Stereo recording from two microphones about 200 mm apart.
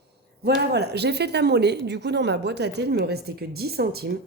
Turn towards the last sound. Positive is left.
turn(degrees=-50)  # may be behind; listen again after turning